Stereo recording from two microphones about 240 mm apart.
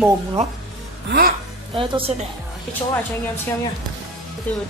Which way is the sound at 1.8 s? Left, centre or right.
Right.